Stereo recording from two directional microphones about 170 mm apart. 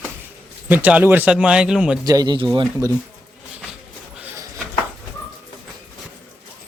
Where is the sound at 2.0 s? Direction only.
25° right (ahead or behind).